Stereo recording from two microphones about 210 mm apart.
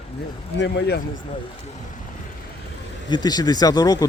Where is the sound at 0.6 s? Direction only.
55° left (ahead or behind).